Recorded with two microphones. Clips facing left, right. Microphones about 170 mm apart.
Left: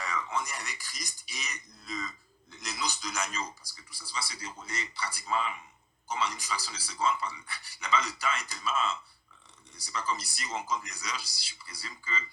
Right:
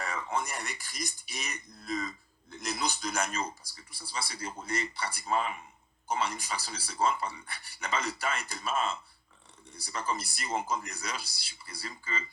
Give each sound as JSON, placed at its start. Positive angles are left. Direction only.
{"t": 0.0, "sound": "speech", "side_deg": -55}